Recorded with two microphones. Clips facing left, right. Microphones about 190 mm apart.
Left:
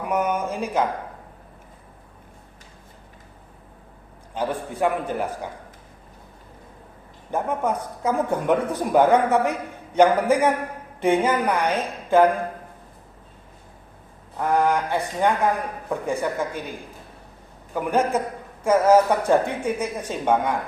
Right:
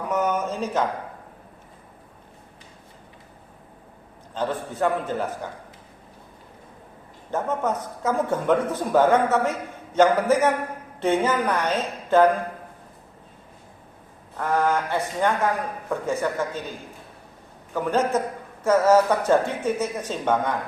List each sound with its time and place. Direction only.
0.1 s a man's voice: 10° left (ahead or behind)
4.4 s speech: 10° left (ahead or behind)
7.3 s speech: 10° left (ahead or behind)
14.3 s speech: 15° left (ahead or behind)
17.7 s speech: 15° left (ahead or behind)